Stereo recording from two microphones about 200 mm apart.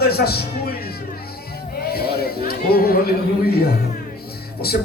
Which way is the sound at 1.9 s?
50° left (ahead or behind).